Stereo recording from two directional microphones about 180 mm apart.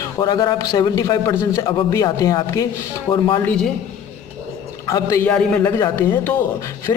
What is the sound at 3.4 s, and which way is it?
Speech, 5° left (ahead or behind).